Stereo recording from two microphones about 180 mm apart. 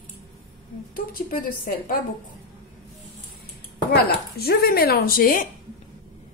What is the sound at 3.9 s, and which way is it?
Speech, 60° left (ahead or behind).